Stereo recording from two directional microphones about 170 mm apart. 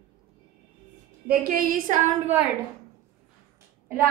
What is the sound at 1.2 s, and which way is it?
Speech, 60° right (ahead or behind).